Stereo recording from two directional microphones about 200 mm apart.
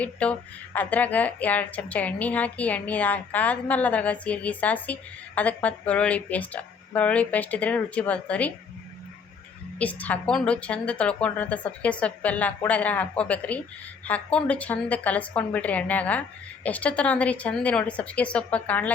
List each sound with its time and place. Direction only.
0.0 s speech: 5° left (ahead or behind)
9.7 s speech: 5° left (ahead or behind)